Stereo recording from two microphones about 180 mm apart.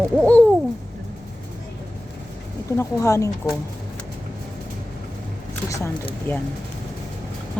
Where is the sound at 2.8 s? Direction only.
15° left (ahead or behind).